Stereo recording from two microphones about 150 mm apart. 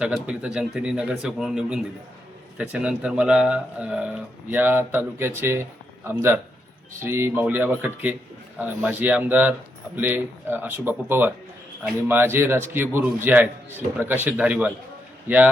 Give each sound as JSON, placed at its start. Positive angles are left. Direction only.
{"t": 0.0, "sound": "a man's voice", "side_deg": -5}